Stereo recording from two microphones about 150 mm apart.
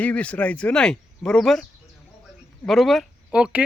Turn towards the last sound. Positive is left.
turn(degrees=-5)  # may be behind; listen again after turning